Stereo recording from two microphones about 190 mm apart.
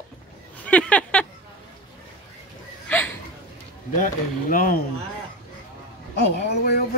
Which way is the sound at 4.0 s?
45° left (ahead or behind).